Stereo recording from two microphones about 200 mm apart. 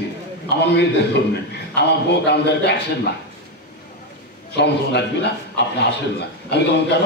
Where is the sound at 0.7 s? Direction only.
55° left (ahead or behind).